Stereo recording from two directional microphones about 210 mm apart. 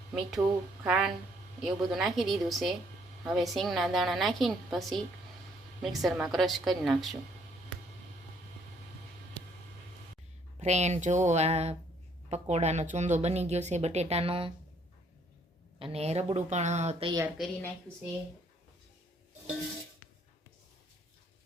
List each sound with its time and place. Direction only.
0.1 s a woman's voice: 5° right (ahead or behind)
10.6 s speech: 30° right (ahead or behind)
15.8 s speech: 30° right (ahead or behind)
17.2 s a woman's voice: 5° right (ahead or behind)